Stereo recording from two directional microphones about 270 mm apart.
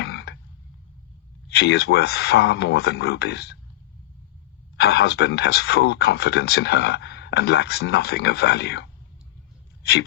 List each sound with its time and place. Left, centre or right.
0.0 s frog: left
1.5 s speech: left
4.8 s speech: left